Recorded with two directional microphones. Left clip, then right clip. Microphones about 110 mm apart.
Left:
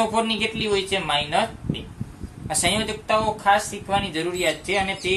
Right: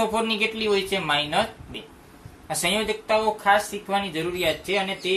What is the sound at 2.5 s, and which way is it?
Speech, 45° left (ahead or behind).